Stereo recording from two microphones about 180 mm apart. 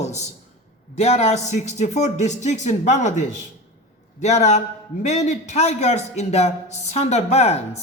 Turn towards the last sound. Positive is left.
turn(degrees=35)  # may be behind; listen again after turning